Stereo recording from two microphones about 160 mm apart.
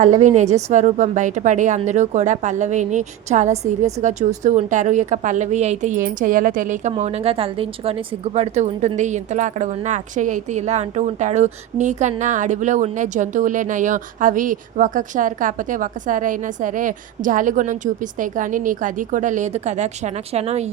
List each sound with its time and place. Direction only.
0.0 s a woman's voice: 50° right (ahead or behind)
6.9 s a woman's voice: 40° right (ahead or behind)